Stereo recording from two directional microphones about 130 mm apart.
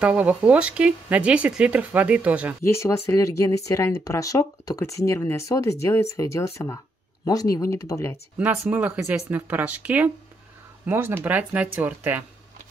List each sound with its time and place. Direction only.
0.0 s speech: 10° right (ahead or behind)
2.6 s speech: 20° left (ahead or behind)
8.4 s speech: 10° right (ahead or behind)